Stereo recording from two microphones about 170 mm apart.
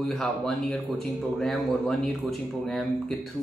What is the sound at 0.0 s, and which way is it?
Speech, centre (ahead or behind).